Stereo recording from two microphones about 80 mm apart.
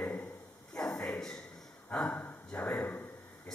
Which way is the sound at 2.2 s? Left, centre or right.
Centre.